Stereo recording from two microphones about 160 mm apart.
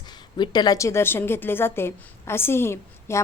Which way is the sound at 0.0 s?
25° left (ahead or behind).